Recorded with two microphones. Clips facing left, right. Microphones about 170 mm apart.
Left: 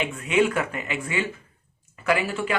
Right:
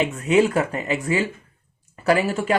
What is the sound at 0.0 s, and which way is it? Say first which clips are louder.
Speech: right 4 dB; 35° right (ahead or behind).